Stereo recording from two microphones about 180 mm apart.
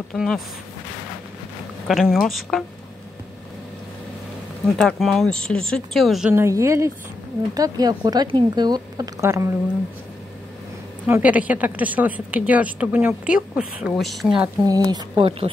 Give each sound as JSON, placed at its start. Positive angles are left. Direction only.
{"t": 0.1, "sound": "speech", "side_deg": 5}
{"t": 1.9, "sound": "speech", "side_deg": 0}
{"t": 4.6, "sound": "speech", "side_deg": 5}
{"t": 6.3, "sound": "a woman's voice", "side_deg": -15}
{"t": 11.1, "sound": "a woman's voice", "side_deg": -10}
{"t": 14.6, "sound": "a woman's voice", "side_deg": -20}